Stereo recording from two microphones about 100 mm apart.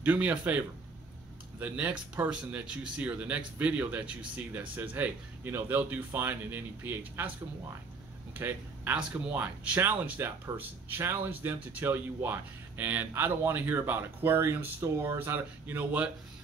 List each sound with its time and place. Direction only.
0.0 s speech: 15° right (ahead or behind)
8.4 s speech: 20° right (ahead or behind)